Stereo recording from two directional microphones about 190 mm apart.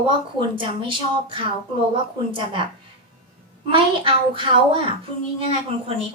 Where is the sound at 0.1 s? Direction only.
25° right (ahead or behind).